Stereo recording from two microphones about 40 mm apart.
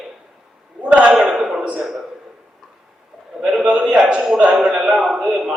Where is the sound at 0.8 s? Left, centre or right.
Right.